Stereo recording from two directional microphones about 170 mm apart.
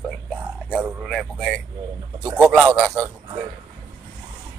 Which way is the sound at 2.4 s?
5° right (ahead or behind).